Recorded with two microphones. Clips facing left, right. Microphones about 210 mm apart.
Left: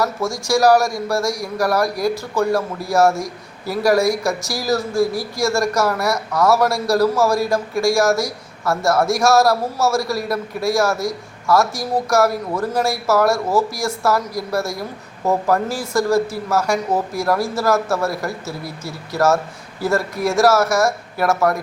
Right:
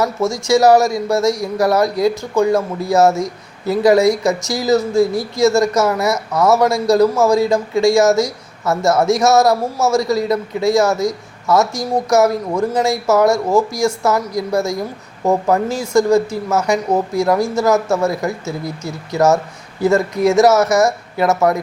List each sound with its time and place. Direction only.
0.4 s speech: 20° right (ahead or behind)